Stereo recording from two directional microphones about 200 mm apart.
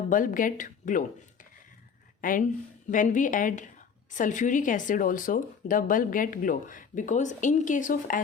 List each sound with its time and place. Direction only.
0.1 s a woman's voice: 40° left (ahead or behind)